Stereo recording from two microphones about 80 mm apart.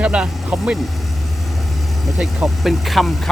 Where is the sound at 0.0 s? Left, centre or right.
Centre.